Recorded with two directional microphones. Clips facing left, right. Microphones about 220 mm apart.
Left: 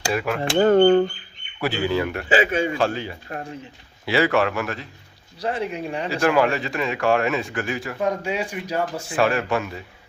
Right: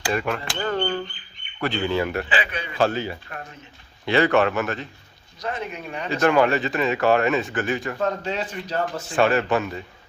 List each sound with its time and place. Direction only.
0.1 s speech: 5° left (ahead or behind)
0.5 s speech: 45° left (ahead or behind)
1.6 s speech: 5° left (ahead or behind)
2.3 s speech: 45° left (ahead or behind)
2.8 s speech: centre (ahead or behind)
3.2 s speech: 30° left (ahead or behind)
4.0 s speech: 5° left (ahead or behind)
5.4 s speech: 30° left (ahead or behind)
6.2 s speech: centre (ahead or behind)
9.1 s speech: centre (ahead or behind)